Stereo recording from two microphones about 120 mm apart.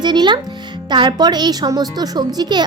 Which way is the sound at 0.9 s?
40° right (ahead or behind).